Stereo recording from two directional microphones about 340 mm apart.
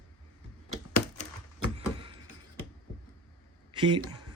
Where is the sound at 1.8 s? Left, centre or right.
Centre.